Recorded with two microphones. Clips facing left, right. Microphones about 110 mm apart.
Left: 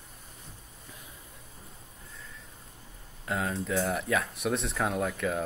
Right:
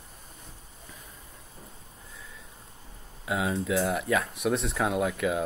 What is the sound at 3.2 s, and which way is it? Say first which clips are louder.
Speech: right 3 dB; 10° right (ahead or behind).